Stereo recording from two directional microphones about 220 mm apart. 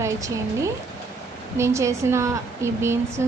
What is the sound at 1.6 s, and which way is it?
A woman's voice, 15° right (ahead or behind).